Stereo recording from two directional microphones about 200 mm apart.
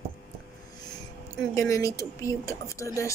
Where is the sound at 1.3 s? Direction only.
15° left (ahead or behind).